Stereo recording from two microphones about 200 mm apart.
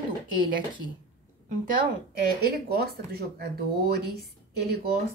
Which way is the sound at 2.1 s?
50° right (ahead or behind).